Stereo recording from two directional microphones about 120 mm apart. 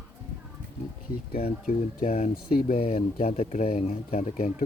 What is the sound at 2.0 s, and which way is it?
Speech, 80° left.